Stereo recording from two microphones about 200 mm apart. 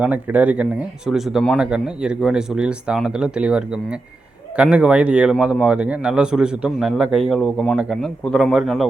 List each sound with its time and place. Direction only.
0.0 s a man's voice: 5° right (ahead or behind)